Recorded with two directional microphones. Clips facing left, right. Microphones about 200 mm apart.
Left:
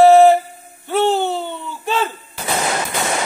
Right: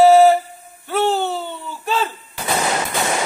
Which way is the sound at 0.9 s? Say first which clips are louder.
Left 2 dB; 10° right (ahead or behind).